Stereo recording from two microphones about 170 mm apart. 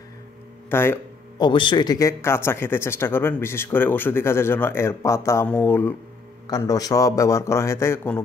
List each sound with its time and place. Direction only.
0.7 s speech: 15° left (ahead or behind)
1.4 s a man's voice: 30° left (ahead or behind)